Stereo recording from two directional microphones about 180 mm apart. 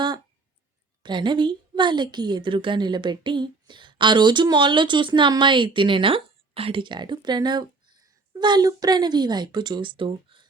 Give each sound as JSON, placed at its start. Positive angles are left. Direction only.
{"t": 1.0, "sound": "a woman's voice", "side_deg": -25}